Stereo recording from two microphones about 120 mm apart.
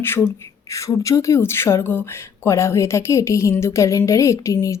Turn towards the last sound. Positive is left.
turn(degrees=25)  # may be behind; listen again after turning